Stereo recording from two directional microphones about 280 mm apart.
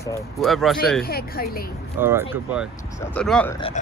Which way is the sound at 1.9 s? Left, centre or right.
Centre.